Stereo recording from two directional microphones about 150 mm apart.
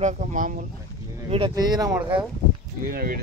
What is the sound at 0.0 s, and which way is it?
Speech, 55° right (ahead or behind).